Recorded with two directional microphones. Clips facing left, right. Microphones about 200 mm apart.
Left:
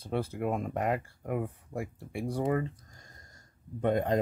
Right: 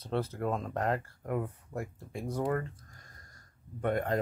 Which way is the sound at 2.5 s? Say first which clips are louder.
Left 3 dB; 15° left (ahead or behind).